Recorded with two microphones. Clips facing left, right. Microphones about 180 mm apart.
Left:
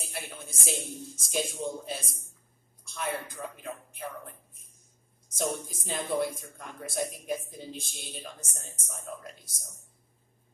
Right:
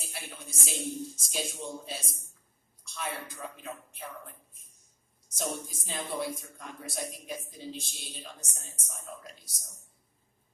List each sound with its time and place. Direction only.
0.0 s speech: 50° left (ahead or behind)